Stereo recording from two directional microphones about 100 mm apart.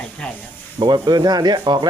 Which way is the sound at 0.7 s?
45° right (ahead or behind).